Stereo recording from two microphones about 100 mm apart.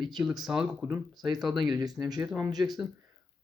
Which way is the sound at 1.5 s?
40° right (ahead or behind).